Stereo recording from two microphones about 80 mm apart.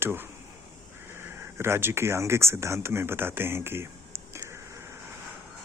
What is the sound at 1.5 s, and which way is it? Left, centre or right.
Speech, right.